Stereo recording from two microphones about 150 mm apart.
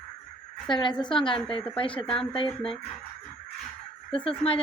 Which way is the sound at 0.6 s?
30° left (ahead or behind).